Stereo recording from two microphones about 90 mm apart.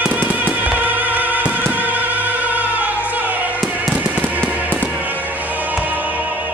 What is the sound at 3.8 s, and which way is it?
Fireworks, 15° right (ahead or behind).